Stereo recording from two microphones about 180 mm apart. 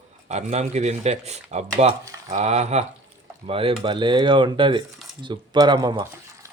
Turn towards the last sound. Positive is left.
turn(degrees=-25)  # may be behind; listen again after turning